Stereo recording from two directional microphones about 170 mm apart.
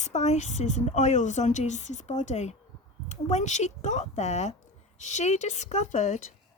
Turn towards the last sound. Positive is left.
turn(degrees=40)  # may be behind; listen again after turning